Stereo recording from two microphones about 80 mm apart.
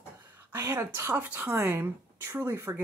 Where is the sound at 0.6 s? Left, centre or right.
Right.